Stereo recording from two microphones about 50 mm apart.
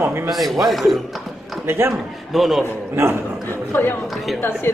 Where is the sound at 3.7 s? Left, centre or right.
Left.